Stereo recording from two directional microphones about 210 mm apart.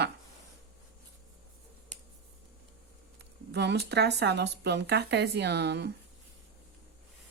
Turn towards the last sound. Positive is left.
turn(degrees=-50)  # may be behind; listen again after turning